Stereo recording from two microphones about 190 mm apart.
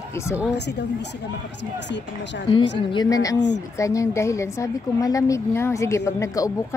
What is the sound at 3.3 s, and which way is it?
Speech, 70° left (ahead or behind).